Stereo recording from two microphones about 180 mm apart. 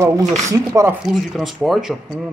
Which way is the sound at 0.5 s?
15° right (ahead or behind).